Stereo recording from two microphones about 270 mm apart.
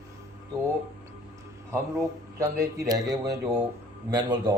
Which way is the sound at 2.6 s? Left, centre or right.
Centre.